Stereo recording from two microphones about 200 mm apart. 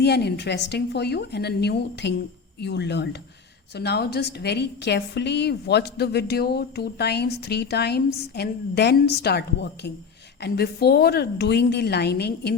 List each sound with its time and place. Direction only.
0.0 s a woman's voice: 55° left (ahead or behind)